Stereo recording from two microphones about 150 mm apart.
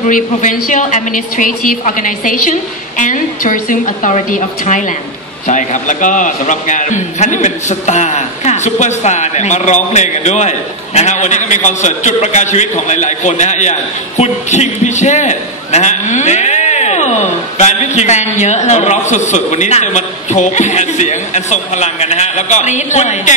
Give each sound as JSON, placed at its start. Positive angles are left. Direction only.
{"t": 0.0, "sound": "a woman's voice", "side_deg": 60}